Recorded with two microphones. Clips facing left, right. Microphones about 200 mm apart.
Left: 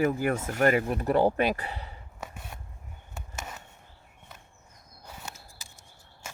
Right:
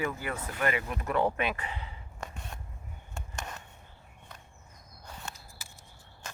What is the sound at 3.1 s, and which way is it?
Chop, 5° left (ahead or behind).